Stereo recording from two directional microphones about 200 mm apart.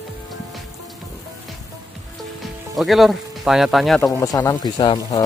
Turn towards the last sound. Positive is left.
turn(degrees=20)  # may be behind; listen again after turning